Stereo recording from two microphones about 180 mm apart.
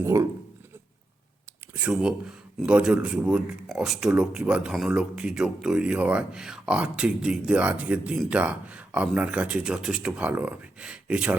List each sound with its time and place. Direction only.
0.0 s speech: 15° right (ahead or behind)
1.7 s speech: 5° right (ahead or behind)